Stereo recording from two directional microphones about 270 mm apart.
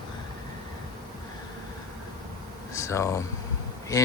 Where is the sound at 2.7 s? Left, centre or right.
Centre.